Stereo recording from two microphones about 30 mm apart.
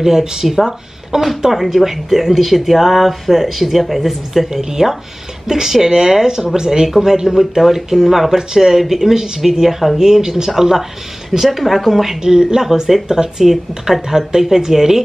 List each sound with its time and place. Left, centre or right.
0.0 s speech: centre
0.6 s speech: centre
4.5 s speech: centre
12.2 s speech: right